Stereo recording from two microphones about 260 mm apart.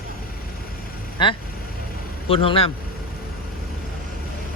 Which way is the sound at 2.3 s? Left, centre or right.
Left.